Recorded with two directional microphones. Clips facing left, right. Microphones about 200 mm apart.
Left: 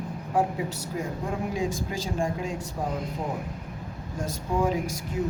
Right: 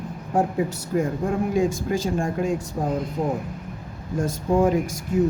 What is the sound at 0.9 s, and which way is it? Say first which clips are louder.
Speech: right 9 dB; 55° right (ahead or behind).